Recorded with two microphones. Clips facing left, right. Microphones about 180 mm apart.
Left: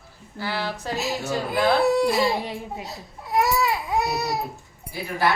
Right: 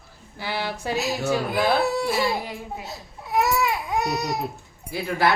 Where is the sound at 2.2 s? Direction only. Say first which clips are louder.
Left 2 dB; 25° left (ahead or behind).